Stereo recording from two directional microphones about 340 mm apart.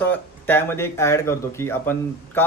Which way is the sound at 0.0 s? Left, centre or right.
Centre.